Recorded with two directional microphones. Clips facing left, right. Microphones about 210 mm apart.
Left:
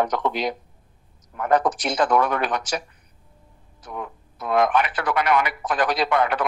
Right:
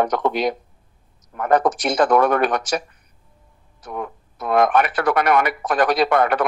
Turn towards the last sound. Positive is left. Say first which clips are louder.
# right 4 dB
turn(degrees=-50)  # may be behind; listen again after turning